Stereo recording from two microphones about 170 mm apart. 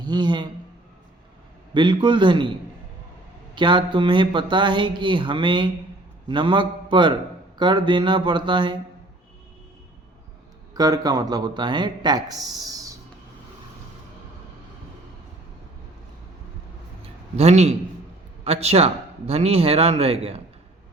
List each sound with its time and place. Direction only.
0.0 s a man's voice: 25° right (ahead or behind)
1.7 s speech: 25° right (ahead or behind)
3.5 s a man's voice: 25° right (ahead or behind)
10.8 s speech: 20° right (ahead or behind)
17.3 s a man's voice: 40° right (ahead or behind)